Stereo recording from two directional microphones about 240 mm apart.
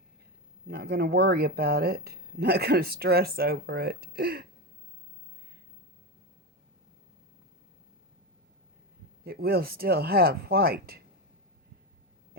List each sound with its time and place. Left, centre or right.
0.7 s speech: right
9.2 s speech: right